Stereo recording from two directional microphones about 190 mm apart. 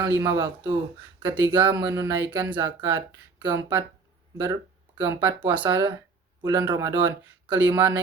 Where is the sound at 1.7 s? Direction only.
15° right (ahead or behind).